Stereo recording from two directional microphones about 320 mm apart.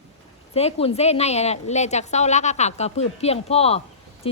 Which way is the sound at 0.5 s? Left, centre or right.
Centre.